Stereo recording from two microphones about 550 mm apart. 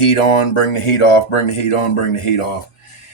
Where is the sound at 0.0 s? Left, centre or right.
Left.